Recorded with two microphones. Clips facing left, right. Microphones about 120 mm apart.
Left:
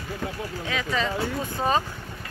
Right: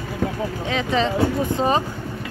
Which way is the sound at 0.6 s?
25° right (ahead or behind).